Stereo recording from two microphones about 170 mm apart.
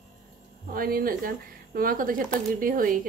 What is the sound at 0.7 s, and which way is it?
Speech, 60° right (ahead or behind).